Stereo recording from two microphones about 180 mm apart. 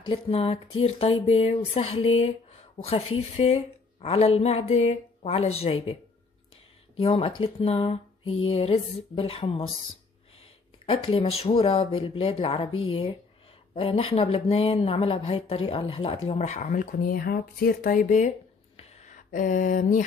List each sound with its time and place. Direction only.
0.0 s speech: 30° left (ahead or behind)
7.0 s speech: 30° left (ahead or behind)
13.7 s speech: 30° left (ahead or behind)
18.8 s a sound: 35° left (ahead or behind)